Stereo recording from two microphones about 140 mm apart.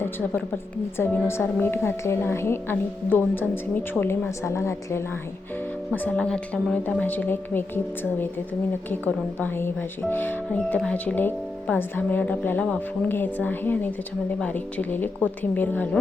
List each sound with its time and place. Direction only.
0.0 s a woman's voice: 15° left (ahead or behind)
8.9 s a woman's voice: 15° left (ahead or behind)